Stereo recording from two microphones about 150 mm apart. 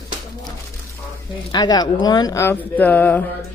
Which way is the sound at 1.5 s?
25° left (ahead or behind).